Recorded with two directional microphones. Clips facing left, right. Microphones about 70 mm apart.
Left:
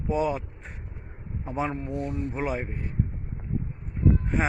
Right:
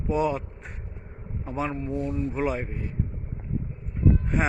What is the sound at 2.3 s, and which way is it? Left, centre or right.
Speech, centre.